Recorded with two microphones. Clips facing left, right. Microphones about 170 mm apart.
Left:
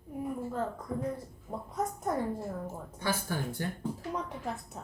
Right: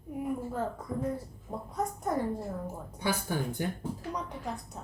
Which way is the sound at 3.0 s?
15° right (ahead or behind).